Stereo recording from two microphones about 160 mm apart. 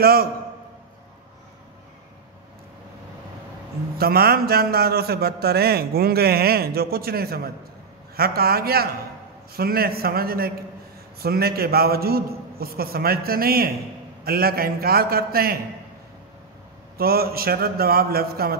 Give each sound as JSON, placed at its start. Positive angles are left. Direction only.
{"t": 0.0, "sound": "a man's voice", "side_deg": -70}
{"t": 4.0, "sound": "a man's voice", "side_deg": -75}
{"t": 16.9, "sound": "a man's voice", "side_deg": -70}